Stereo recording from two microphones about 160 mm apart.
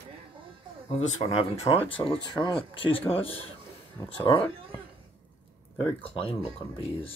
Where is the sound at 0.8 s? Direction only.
40° left (ahead or behind).